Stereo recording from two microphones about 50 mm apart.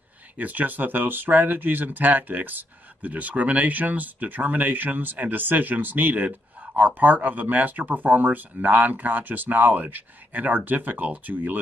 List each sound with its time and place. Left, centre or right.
0.4 s speech: right